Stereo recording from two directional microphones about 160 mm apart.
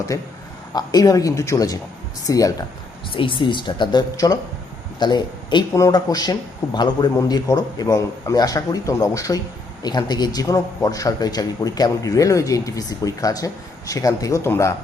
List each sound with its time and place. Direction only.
0.1 s a man's voice: 20° left (ahead or behind)
3.1 s a man's voice: 30° left (ahead or behind); by 14.8 s 15° left (ahead or behind)